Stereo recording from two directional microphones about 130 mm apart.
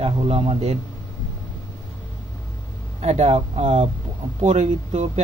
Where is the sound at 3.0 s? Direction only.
55° right (ahead or behind).